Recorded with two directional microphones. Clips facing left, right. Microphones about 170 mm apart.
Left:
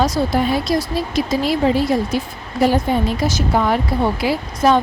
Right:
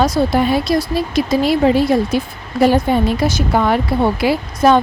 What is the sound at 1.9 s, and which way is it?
Speech, 60° right (ahead or behind).